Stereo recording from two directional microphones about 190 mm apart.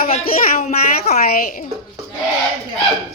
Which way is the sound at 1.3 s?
50° left (ahead or behind).